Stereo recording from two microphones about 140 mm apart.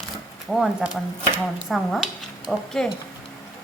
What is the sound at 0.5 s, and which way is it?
Speech, 5° right (ahead or behind).